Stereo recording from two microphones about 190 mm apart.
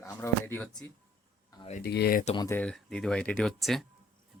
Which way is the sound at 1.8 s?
55° left (ahead or behind).